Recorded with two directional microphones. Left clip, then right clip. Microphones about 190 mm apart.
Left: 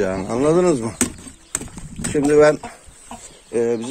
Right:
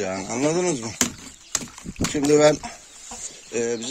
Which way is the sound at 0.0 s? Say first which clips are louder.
Left 5 dB; 10° left (ahead or behind).